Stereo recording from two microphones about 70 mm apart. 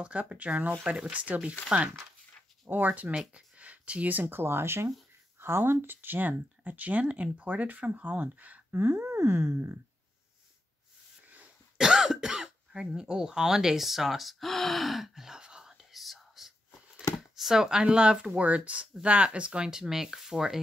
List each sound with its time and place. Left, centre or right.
0.0 s speech: centre
2.7 s speech: right
11.2 s cough: right
11.8 s cough: centre
17.4 s speech: centre